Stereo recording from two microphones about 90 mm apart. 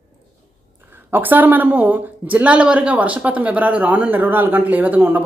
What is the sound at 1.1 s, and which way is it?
Speech, 20° right (ahead or behind).